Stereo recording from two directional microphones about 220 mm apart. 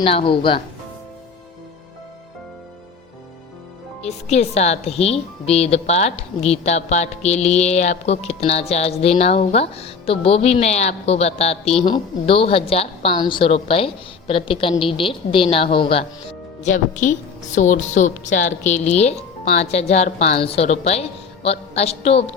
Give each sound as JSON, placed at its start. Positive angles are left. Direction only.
{"t": 0.0, "sound": "speech", "side_deg": 25}
{"t": 4.0, "sound": "speech", "side_deg": 30}
{"t": 16.6, "sound": "a woman's voice", "side_deg": 35}